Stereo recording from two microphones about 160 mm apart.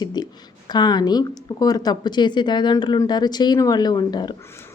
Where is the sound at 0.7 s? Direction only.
25° left (ahead or behind).